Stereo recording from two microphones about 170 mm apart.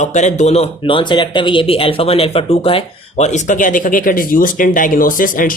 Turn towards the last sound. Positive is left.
turn(degrees=55)  # may be behind; listen again after turning